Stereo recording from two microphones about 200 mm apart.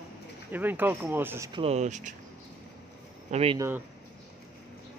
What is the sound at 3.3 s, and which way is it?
Speech, 30° right (ahead or behind).